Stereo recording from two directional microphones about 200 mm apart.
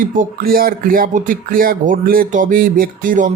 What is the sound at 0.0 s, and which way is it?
Speech, 45° right (ahead or behind).